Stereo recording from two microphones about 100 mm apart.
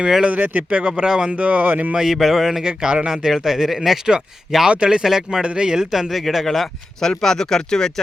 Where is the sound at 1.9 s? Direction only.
5° right (ahead or behind).